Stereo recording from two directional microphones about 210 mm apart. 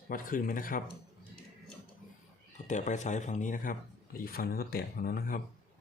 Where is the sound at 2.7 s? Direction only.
35° left (ahead or behind).